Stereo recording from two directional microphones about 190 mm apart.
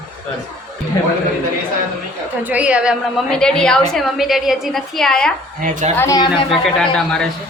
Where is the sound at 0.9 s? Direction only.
20° left (ahead or behind).